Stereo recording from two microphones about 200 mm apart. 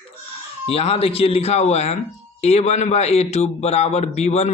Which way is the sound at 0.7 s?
30° left (ahead or behind).